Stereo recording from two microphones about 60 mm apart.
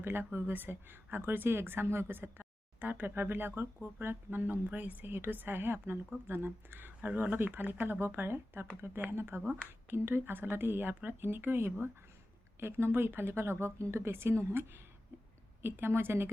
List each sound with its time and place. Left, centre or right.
0.0 s speech: right